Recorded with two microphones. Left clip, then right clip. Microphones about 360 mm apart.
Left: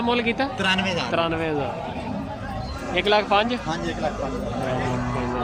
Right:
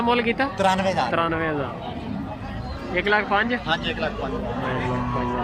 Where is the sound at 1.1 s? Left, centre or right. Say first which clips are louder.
Even; centre.